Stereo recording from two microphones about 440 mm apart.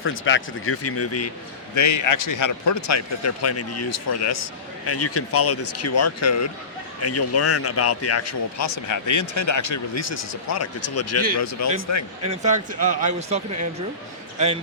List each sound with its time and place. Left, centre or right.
0.0 s a man's voice: left
12.3 s speech: centre